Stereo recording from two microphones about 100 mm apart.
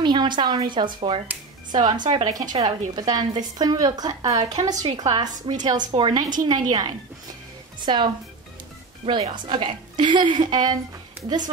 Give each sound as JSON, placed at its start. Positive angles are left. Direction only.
{"t": 0.0, "sound": "a woman's voice", "side_deg": -50}
{"t": 9.0, "sound": "a woman's voice", "side_deg": -60}